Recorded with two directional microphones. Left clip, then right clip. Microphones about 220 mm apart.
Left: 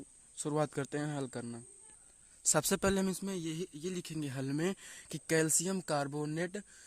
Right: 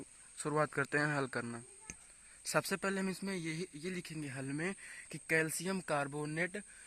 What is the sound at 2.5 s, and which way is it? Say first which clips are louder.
Speech: left 3 dB; 35° left (ahead or behind).